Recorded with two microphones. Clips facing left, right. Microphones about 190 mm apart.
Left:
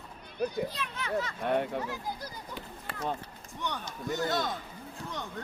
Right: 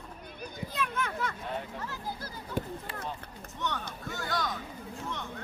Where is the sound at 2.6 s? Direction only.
45° right (ahead or behind).